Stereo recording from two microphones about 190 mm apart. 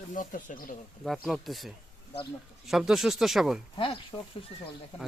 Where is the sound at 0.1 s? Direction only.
45° left (ahead or behind).